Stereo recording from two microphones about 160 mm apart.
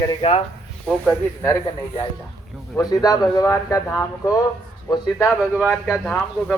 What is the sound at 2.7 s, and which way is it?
Speech, 25° left (ahead or behind).